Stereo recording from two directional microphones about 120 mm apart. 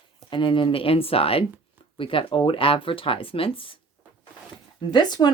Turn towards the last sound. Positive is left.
turn(degrees=35)  # may be behind; listen again after turning